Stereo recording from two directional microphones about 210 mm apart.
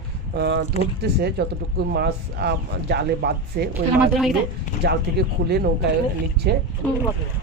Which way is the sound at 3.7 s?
Centre (ahead or behind).